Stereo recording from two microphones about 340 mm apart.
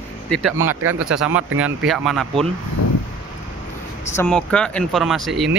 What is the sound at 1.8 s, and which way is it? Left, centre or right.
Mantra, centre.